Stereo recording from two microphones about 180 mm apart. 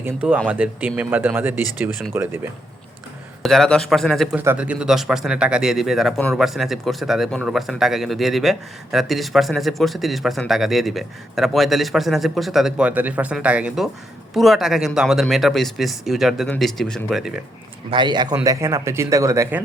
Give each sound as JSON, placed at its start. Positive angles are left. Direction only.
{"t": 0.0, "sound": "speech", "side_deg": -10}
{"t": 3.4, "sound": "speech", "side_deg": 0}
{"t": 17.9, "sound": "a man's voice", "side_deg": -25}